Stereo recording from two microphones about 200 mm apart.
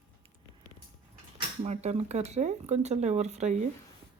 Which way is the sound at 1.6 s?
35° right (ahead or behind).